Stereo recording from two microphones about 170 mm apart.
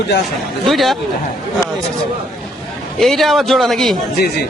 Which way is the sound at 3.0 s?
Centre (ahead or behind).